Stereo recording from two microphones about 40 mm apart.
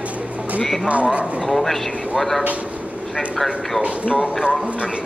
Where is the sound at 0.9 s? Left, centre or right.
Right.